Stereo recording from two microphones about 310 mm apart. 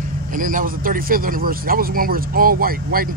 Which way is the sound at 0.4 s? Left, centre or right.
Right.